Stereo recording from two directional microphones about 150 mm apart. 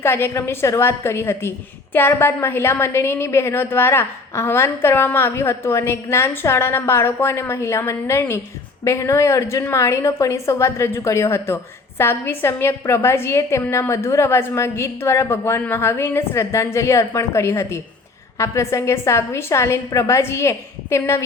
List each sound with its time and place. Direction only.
0.0 s a woman's voice: 15° left (ahead or behind)